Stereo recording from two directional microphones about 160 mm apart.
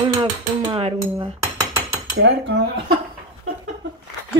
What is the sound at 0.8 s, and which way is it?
Cutlery, 35° right (ahead or behind).